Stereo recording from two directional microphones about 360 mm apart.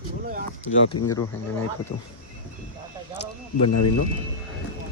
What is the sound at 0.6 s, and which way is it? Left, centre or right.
Speech, left.